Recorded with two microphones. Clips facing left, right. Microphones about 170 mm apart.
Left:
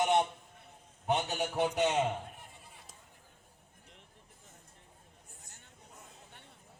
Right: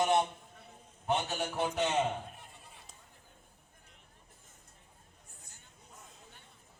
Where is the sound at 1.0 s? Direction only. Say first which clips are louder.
Left 1 dB; 15° left (ahead or behind).